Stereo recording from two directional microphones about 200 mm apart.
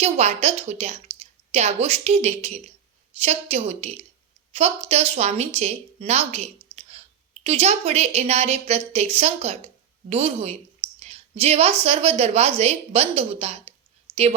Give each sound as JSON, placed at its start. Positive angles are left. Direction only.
{"t": 0.0, "sound": "a woman's voice", "side_deg": -35}